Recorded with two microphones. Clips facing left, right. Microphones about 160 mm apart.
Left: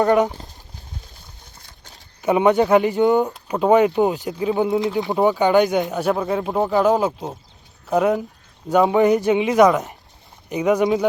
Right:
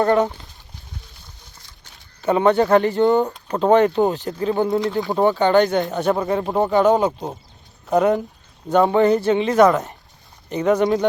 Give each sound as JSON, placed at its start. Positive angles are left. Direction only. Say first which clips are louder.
{"t": 0.0, "sound": "speech", "louder": "left 1 dB", "side_deg": 10}
{"t": 2.2, "sound": "speech", "louder": "even", "side_deg": 10}
{"t": 4.9, "sound": "speech", "louder": "even", "side_deg": 20}